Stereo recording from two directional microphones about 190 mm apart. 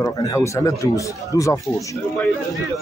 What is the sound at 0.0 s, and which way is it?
Speech, 15° left (ahead or behind).